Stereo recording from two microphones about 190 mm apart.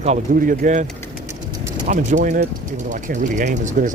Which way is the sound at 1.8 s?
45° right (ahead or behind).